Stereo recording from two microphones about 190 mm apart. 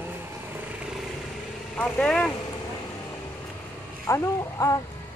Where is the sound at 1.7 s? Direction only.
5° left (ahead or behind).